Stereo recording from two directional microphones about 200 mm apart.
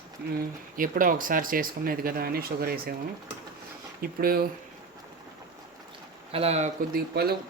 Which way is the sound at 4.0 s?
50° right (ahead or behind).